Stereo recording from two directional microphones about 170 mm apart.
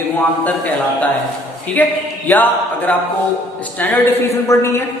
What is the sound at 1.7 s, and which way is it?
Speech, 10° left (ahead or behind).